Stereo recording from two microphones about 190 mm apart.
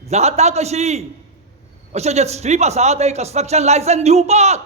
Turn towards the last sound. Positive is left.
turn(degrees=-35)  # may be behind; listen again after turning